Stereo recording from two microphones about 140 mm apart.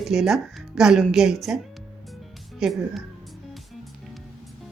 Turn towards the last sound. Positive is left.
turn(degrees=-5)  # may be behind; listen again after turning